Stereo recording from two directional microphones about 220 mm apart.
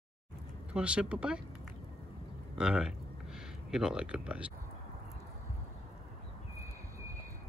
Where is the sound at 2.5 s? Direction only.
5° right (ahead or behind).